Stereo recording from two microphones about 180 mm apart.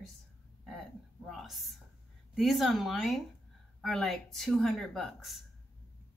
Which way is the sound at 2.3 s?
Centre (ahead or behind).